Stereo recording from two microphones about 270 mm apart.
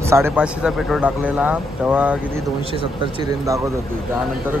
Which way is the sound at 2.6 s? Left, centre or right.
Right.